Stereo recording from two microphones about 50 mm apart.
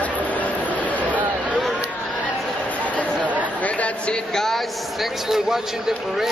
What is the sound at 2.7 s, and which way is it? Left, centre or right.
Chatter, left.